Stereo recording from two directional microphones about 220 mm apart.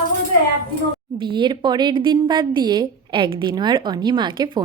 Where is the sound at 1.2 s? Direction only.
20° right (ahead or behind).